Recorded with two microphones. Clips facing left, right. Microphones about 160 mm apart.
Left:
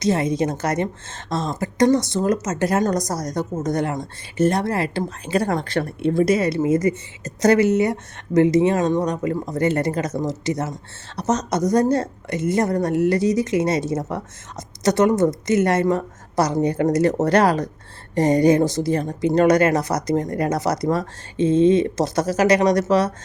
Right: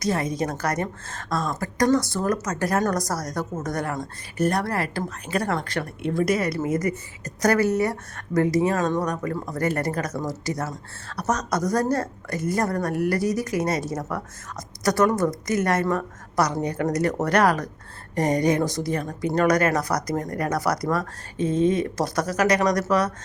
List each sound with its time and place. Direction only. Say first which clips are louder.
0.0 s speech: left 5 dB; 25° left (ahead or behind)